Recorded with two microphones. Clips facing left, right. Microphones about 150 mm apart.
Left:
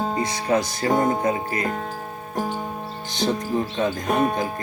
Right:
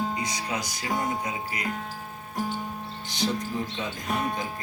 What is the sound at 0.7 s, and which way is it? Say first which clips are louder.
Speech: left 9 dB; 50° left (ahead or behind).